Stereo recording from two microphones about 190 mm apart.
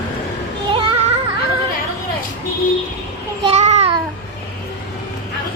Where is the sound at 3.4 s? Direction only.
35° right (ahead or behind).